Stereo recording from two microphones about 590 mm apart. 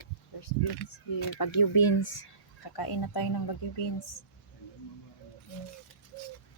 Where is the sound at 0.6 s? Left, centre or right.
Left.